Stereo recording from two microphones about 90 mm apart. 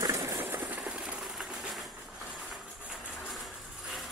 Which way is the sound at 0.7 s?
10° right (ahead or behind).